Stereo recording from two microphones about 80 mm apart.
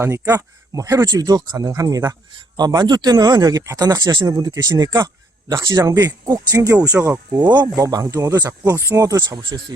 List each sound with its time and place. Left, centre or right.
0.0 s speech: right
2.6 s speech: right
3.6 s speech: right
5.8 s speech: right
7.3 s speech: right
7.8 s speech: right
8.8 s speech: right
9.4 s speech: right